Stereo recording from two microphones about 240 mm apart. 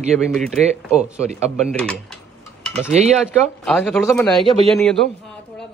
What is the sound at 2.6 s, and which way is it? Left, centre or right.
Cutlery, centre.